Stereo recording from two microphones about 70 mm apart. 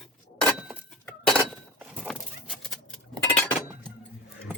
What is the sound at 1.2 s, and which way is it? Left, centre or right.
Chink, centre.